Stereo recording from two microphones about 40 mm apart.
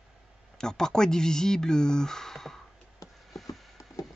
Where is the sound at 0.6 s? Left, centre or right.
Centre.